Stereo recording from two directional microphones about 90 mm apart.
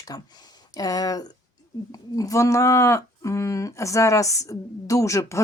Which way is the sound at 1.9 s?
40° left (ahead or behind).